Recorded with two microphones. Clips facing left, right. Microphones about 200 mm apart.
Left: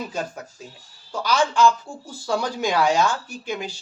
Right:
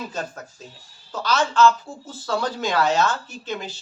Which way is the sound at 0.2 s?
10° left (ahead or behind).